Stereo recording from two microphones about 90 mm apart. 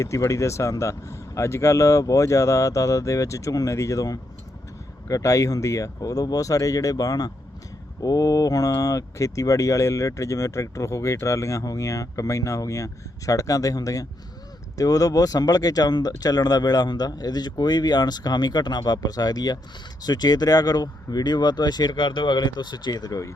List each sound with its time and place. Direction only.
0.0 s speech: 35° left (ahead or behind)